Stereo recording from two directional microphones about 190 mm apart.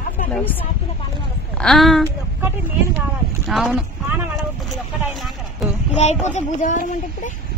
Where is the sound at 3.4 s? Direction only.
Centre (ahead or behind).